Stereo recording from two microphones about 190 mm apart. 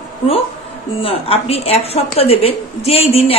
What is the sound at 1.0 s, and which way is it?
A woman's voice, 30° left (ahead or behind).